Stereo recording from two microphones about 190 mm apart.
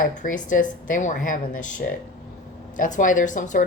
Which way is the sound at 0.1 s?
40° left (ahead or behind).